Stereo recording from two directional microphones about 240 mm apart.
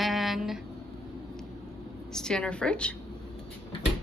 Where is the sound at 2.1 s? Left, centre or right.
Centre.